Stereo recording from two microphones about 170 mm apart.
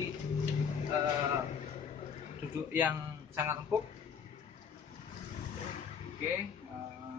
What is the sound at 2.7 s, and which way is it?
Speech, 10° right (ahead or behind).